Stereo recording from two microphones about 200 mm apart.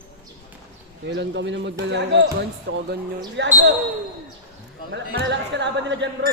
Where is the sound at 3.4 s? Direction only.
60° right (ahead or behind).